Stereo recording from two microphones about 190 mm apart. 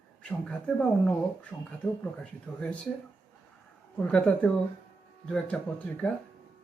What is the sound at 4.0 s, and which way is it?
A man's voice, 5° left (ahead or behind).